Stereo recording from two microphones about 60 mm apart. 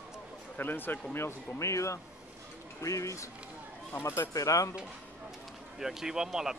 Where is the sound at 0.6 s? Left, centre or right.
Left.